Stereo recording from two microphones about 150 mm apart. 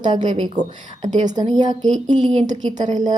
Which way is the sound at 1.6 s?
30° right (ahead or behind).